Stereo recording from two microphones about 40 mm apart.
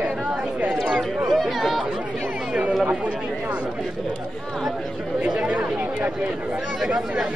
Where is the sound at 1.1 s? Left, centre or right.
Centre.